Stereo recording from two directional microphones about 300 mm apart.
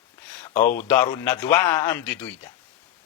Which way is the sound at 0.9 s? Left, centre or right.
Centre.